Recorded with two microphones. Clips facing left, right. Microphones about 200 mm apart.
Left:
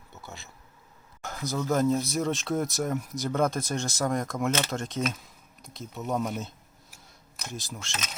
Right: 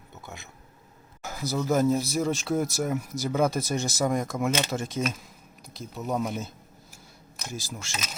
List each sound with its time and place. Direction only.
1.2 s speech: 5° right (ahead or behind)
4.5 s speech: 15° right (ahead or behind)
4.8 s speech: 5° right (ahead or behind)